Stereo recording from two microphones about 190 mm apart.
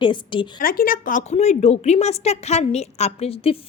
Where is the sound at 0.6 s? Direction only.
50° left (ahead or behind).